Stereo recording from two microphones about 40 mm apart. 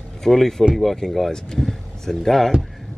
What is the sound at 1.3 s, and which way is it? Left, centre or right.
Speech, centre.